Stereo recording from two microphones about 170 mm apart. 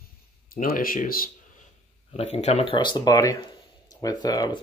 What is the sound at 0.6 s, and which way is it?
Speech, 55° left (ahead or behind).